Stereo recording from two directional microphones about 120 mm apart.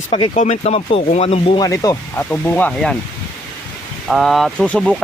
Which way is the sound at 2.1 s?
15° left (ahead or behind).